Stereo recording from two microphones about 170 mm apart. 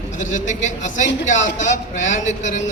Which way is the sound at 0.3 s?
45° left (ahead or behind).